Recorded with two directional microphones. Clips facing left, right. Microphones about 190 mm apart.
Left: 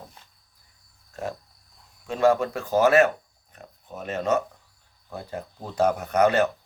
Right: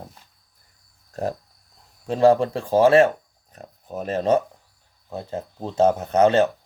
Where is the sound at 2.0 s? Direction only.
35° right (ahead or behind).